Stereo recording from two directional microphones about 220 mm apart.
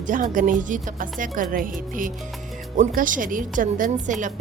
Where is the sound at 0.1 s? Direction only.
35° right (ahead or behind).